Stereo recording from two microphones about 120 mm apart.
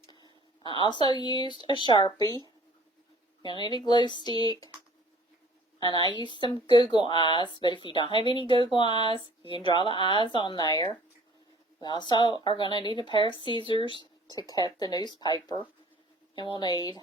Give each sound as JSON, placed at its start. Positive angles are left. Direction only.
{"t": 0.1, "sound": "a sound", "side_deg": 35}
{"t": 1.8, "sound": "speech", "side_deg": 40}
{"t": 3.4, "sound": "speech", "side_deg": 40}
{"t": 5.8, "sound": "speech", "side_deg": 35}